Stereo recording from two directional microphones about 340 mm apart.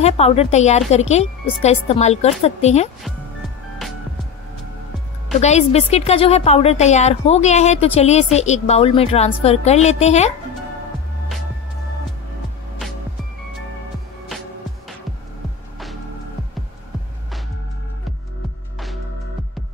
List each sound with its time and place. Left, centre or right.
0.0 s a woman's voice: centre
5.4 s a woman's voice: centre